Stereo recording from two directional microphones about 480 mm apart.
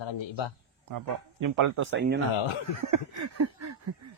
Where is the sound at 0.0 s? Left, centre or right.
Left.